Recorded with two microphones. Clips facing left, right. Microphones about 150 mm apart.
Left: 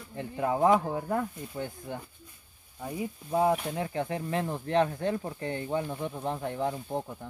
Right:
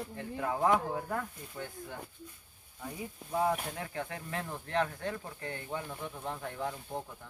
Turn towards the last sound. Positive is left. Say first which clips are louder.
# left 6 dB
turn(degrees=25)  # may be behind; listen again after turning